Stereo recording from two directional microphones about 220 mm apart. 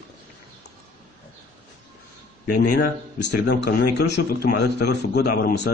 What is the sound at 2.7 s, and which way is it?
A man's voice, 50° left (ahead or behind).